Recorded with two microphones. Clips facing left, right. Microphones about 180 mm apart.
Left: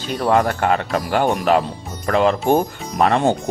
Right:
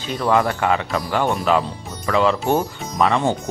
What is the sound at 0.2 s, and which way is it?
Speech, 45° left (ahead or behind).